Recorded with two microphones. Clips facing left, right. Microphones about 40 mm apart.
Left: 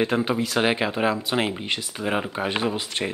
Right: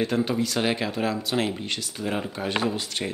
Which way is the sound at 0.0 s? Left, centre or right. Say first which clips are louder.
Left 2 dB; left.